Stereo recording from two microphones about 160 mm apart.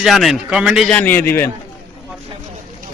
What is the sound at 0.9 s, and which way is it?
Speech, 10° left (ahead or behind).